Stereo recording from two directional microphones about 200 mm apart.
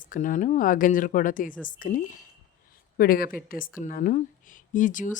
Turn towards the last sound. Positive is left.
turn(degrees=40)  # may be behind; listen again after turning